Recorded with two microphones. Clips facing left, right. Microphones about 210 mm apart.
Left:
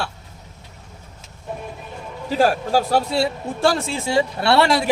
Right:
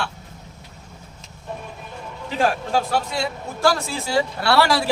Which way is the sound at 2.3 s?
40° left (ahead or behind).